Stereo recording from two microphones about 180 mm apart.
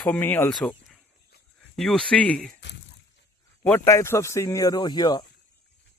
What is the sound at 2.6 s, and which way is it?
Speech, 75° left (ahead or behind).